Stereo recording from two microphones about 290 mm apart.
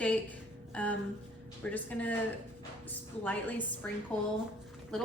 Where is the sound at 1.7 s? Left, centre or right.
Centre.